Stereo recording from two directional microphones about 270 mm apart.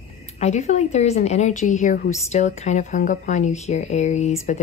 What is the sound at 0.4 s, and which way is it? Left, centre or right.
A woman's voice, left.